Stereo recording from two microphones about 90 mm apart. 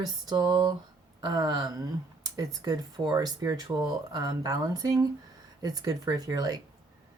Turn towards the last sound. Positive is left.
turn(degrees=-45)  # may be behind; listen again after turning